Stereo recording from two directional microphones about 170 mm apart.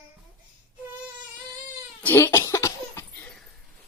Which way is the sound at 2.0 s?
15° left (ahead or behind).